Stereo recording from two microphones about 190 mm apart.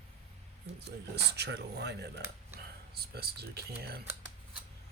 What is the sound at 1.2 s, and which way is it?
Speech, 60° right (ahead or behind).